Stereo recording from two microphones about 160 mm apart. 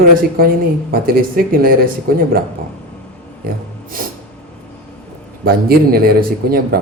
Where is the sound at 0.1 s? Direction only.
65° right (ahead or behind).